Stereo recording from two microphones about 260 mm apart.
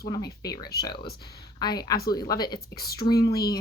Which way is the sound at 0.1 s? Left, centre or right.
Centre.